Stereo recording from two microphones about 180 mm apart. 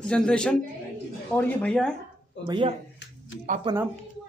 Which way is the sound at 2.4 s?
25° right (ahead or behind).